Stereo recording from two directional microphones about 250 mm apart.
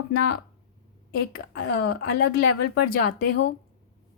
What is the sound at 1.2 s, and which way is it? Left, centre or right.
A woman's voice, left.